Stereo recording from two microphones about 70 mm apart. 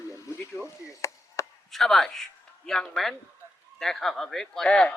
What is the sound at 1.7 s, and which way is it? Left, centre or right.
Speech, centre.